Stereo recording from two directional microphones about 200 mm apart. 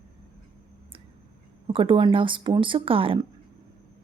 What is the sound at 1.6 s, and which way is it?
Speech, 25° right (ahead or behind).